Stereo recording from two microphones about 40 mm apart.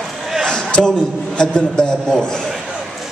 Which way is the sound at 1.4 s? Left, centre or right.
Left.